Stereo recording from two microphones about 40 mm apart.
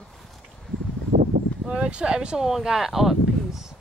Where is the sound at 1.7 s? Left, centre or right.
Right.